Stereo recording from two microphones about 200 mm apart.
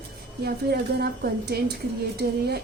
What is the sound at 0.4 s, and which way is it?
A woman's voice, 55° right (ahead or behind).